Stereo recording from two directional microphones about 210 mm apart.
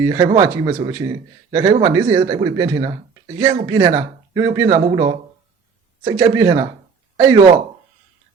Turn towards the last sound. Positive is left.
turn(degrees=-10)  # may be behind; listen again after turning